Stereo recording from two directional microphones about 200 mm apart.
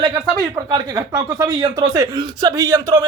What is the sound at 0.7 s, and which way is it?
Speech, 20° right (ahead or behind).